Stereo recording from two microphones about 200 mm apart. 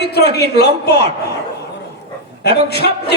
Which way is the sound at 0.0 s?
55° left (ahead or behind).